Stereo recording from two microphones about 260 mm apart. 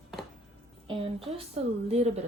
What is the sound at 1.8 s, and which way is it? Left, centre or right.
Speech, right.